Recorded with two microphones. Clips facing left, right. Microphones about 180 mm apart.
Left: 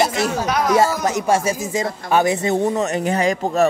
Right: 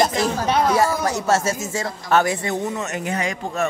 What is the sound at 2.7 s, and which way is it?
Speech, 35° left (ahead or behind).